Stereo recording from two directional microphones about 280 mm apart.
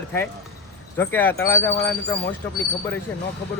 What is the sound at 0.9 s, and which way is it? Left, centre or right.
Speech, centre.